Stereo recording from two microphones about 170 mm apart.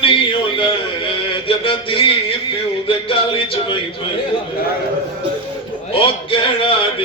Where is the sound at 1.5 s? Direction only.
30° left (ahead or behind).